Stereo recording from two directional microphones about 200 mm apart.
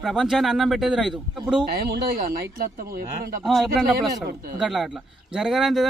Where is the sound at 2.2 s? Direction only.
45° right (ahead or behind).